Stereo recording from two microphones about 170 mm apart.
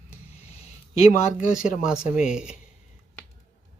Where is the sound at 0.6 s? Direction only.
40° left (ahead or behind).